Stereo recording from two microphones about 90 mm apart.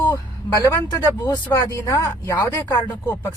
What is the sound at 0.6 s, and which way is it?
Speech, 45° left (ahead or behind).